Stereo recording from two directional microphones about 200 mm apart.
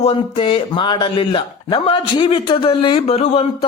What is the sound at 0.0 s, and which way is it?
A man's voice, 25° left (ahead or behind).